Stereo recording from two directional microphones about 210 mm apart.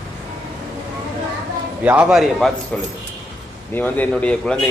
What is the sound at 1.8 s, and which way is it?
A man's voice, 5° right (ahead or behind).